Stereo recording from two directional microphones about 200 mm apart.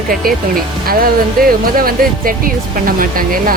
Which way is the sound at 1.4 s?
45° right (ahead or behind).